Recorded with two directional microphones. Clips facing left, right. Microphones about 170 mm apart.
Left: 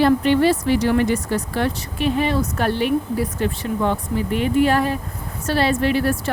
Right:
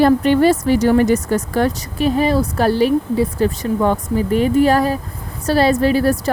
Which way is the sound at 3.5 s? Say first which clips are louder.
Right 4 dB; 45° right (ahead or behind).